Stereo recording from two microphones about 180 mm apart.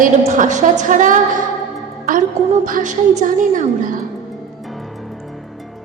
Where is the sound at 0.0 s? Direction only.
45° right (ahead or behind).